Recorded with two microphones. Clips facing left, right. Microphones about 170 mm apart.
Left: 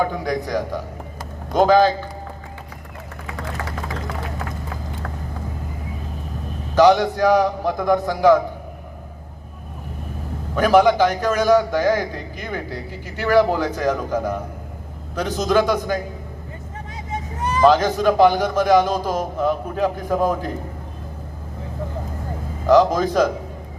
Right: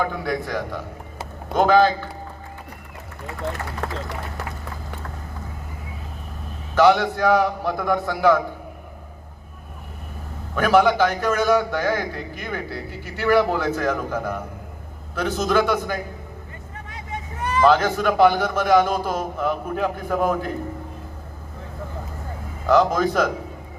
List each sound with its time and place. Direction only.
0.0 s a man's voice: 15° left (ahead or behind)
3.8 s speech: 65° right (ahead or behind)
6.7 s a man's voice: 15° left (ahead or behind)
10.5 s a man's voice: 15° left (ahead or behind)
17.6 s a man's voice: 15° left (ahead or behind)
22.6 s a man's voice: 15° left (ahead or behind)